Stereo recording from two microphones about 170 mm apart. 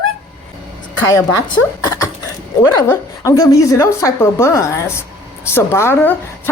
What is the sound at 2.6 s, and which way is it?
Speech, 20° left (ahead or behind).